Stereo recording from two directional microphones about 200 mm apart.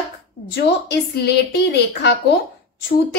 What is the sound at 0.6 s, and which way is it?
A child's voice, 55° left (ahead or behind).